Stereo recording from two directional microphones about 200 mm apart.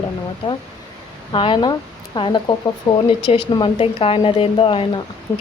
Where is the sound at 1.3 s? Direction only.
25° left (ahead or behind).